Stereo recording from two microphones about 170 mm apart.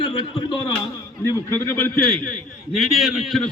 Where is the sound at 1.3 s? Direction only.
15° left (ahead or behind).